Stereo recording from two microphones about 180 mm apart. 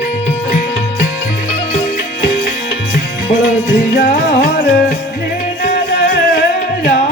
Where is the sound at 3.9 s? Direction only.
55° left (ahead or behind).